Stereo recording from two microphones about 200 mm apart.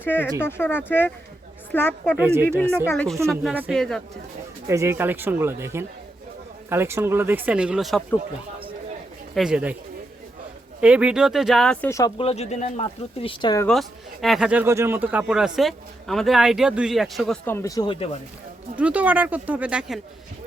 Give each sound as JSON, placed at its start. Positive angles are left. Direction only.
{"t": 0.0, "sound": "speech", "side_deg": 10}
{"t": 2.1, "sound": "speech", "side_deg": -10}
{"t": 2.9, "sound": "speech", "side_deg": 5}
{"t": 3.2, "sound": "a man's voice", "side_deg": -5}
{"t": 4.6, "sound": "speech", "side_deg": -15}
{"t": 9.3, "sound": "a man's voice", "side_deg": -5}
{"t": 10.8, "sound": "a man's voice", "side_deg": -5}
{"t": 12.1, "sound": "speech", "side_deg": 30}
{"t": 13.2, "sound": "speech", "side_deg": 25}
{"t": 13.7, "sound": "a man's voice", "side_deg": 0}
{"t": 18.8, "sound": "speech", "side_deg": -5}